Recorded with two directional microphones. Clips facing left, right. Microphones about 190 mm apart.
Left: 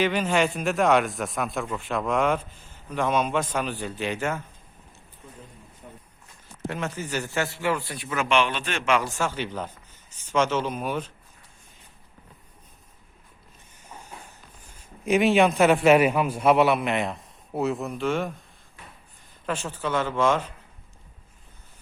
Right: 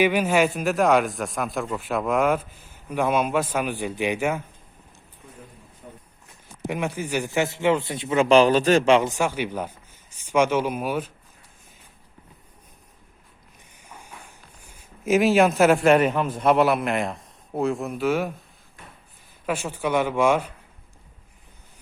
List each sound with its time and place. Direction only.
0.0 s speech: 10° right (ahead or behind)
6.7 s a man's voice: 15° right (ahead or behind); by 9.0 s 35° right (ahead or behind)
9.0 s speech: 15° right (ahead or behind)
13.7 s a sound: 10° right (ahead or behind)
14.3 s speech: 10° right (ahead or behind)
19.5 s speech: 10° right (ahead or behind)